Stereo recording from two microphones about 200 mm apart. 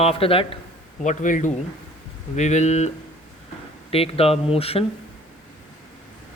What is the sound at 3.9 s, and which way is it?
Speech, 30° left (ahead or behind).